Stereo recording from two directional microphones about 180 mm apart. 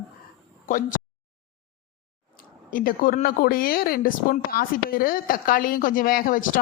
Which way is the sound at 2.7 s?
50° left (ahead or behind).